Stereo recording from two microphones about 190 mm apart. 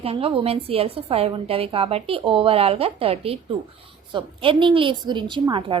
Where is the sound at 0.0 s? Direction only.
30° right (ahead or behind).